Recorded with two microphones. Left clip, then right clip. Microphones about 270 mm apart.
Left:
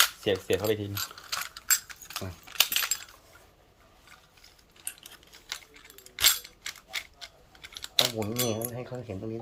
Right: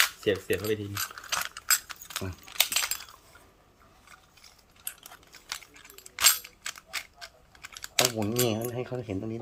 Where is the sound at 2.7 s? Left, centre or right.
Centre.